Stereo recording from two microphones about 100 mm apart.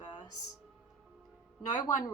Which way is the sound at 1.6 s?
40° left (ahead or behind).